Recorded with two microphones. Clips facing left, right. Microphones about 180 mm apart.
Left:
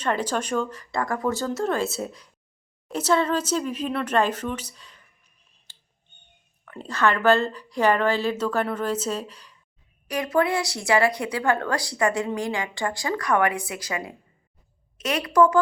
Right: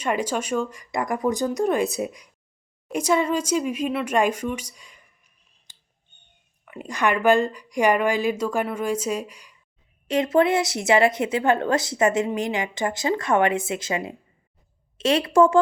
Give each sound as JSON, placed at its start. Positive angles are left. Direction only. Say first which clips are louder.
{"t": 0.0, "sound": "speech", "louder": "right 1 dB", "side_deg": -10}
{"t": 6.7, "sound": "speech", "louder": "even", "side_deg": -10}
{"t": 10.1, "sound": "a woman's voice", "louder": "right 4 dB", "side_deg": -25}